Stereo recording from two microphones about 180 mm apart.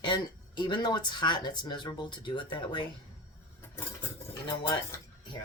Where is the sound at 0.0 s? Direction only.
25° left (ahead or behind).